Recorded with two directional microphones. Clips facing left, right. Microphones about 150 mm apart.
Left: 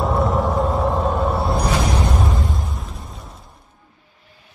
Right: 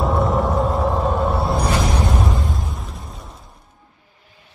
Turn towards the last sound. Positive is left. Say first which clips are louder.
# even
turn(degrees=0)  # may be behind; listen again after turning